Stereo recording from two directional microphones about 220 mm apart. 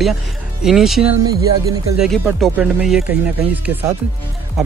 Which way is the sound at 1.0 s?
20° right (ahead or behind).